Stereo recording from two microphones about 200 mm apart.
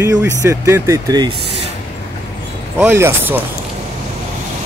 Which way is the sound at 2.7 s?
10° right (ahead or behind).